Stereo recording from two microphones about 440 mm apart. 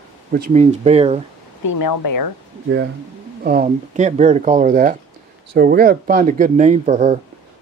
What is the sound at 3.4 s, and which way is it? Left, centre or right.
Speech, centre.